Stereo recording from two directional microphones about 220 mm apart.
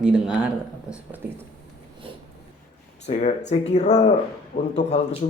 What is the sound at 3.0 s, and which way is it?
Speech, 30° left (ahead or behind).